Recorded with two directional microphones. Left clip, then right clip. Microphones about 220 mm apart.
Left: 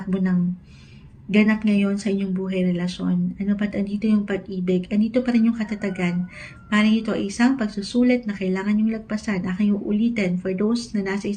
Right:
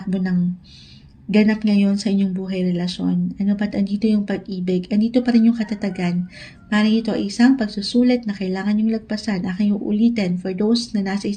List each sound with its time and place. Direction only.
0.1 s speech: 50° right (ahead or behind)
3.0 s speech: 30° right (ahead or behind)
3.3 s speech: 50° right (ahead or behind)